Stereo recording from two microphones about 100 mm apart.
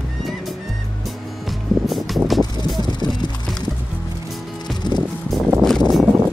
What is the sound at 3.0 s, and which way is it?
Music, 45° left (ahead or behind).